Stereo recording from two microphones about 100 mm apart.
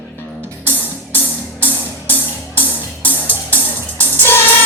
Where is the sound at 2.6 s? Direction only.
15° left (ahead or behind).